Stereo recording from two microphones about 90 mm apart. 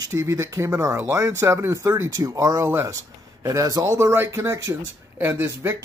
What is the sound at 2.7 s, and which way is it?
Speech, 25° right (ahead or behind).